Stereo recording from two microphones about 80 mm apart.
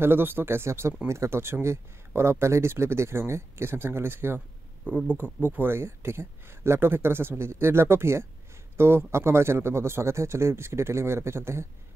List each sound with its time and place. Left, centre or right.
0.0 s speech: right